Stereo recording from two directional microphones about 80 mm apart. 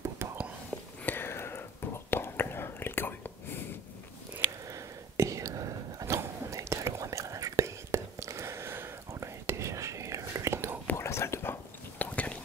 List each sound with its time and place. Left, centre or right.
0.2 s whispering: right
0.7 s whispering: left
4.6 s whispering: right
11.0 s whispering: left
12.0 s a sound: centre